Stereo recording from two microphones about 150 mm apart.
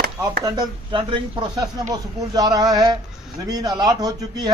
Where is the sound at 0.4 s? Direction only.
25° right (ahead or behind).